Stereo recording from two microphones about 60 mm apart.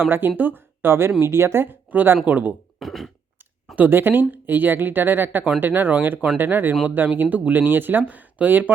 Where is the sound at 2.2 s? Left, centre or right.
Right.